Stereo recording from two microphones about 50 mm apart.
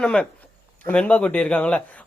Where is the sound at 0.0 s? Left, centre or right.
Centre.